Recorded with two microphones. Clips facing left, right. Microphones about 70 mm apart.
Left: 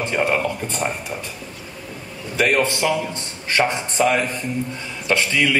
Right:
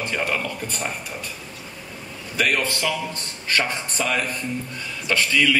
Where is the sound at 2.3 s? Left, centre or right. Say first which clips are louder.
Left 4 dB; left.